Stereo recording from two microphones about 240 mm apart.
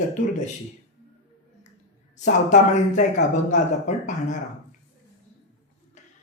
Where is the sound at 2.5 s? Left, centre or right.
Left.